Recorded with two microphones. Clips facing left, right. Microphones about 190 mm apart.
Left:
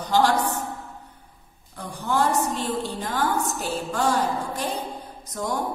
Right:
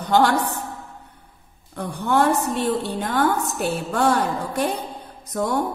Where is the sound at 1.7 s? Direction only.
60° right (ahead or behind).